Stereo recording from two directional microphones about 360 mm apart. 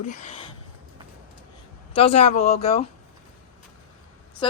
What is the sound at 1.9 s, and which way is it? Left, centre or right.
Speech, centre.